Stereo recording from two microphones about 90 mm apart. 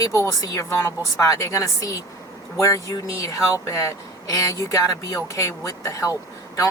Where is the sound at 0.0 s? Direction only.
35° left (ahead or behind).